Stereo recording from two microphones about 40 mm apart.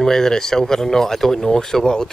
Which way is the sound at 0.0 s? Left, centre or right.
Centre.